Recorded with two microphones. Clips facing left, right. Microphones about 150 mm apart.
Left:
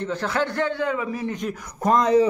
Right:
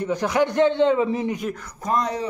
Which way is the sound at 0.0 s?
15° right (ahead or behind).